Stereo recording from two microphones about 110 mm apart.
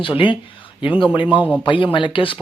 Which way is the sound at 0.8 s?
50° left (ahead or behind).